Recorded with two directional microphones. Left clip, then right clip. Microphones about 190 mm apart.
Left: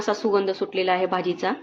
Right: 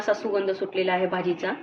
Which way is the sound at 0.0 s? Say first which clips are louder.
Left 2 dB; 65° left (ahead or behind).